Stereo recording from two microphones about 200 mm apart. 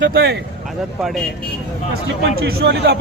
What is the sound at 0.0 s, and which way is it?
Speech, 55° right (ahead or behind).